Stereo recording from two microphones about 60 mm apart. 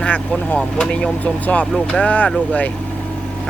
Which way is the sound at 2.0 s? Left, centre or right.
Left.